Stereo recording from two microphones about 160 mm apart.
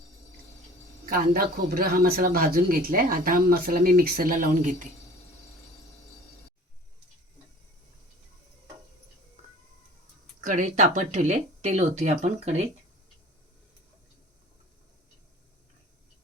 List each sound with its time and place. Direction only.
1.1 s speech: 65° right (ahead or behind)
10.4 s speech: 50° right (ahead or behind)